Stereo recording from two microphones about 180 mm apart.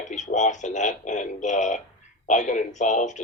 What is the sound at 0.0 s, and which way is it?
Speech, 40° left (ahead or behind).